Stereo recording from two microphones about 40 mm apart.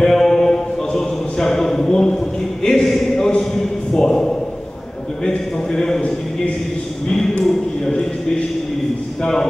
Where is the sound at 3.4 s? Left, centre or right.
Centre.